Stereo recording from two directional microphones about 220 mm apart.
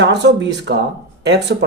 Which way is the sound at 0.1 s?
50° right (ahead or behind).